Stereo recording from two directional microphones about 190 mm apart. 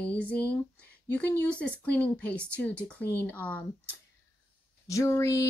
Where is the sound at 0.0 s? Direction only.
5° left (ahead or behind).